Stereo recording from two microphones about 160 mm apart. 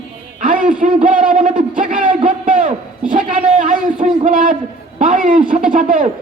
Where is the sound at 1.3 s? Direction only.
55° right (ahead or behind).